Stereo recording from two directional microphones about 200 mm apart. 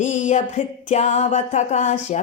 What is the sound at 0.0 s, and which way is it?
Music, 35° left (ahead or behind).